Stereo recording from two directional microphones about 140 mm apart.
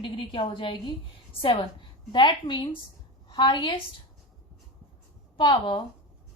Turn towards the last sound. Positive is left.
turn(degrees=30)  # may be behind; listen again after turning